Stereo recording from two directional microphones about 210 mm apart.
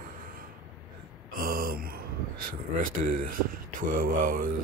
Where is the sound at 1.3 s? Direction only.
45° right (ahead or behind).